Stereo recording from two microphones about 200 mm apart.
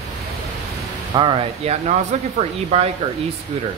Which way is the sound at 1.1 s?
25° right (ahead or behind).